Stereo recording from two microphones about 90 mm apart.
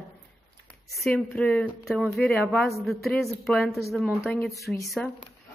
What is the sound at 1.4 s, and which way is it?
Speech, 15° left (ahead or behind).